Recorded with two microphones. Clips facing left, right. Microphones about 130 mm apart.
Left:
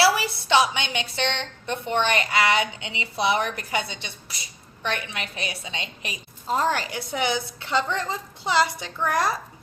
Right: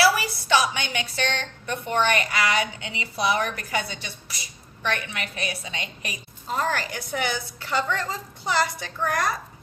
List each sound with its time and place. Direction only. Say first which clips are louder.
0.0 s a woman's voice: even; 25° left (ahead or behind)